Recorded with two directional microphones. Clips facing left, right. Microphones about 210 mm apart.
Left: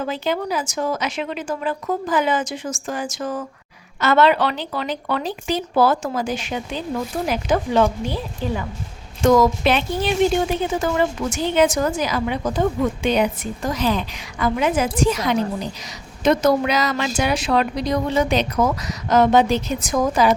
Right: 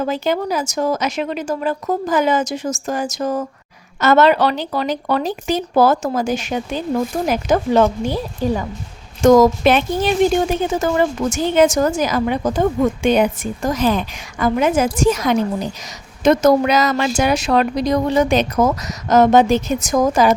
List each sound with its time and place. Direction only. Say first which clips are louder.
0.0 s a woman's voice: right 4 dB; 45° right (ahead or behind)